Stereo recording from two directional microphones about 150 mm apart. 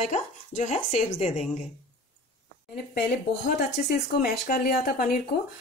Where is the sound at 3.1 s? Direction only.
90° left.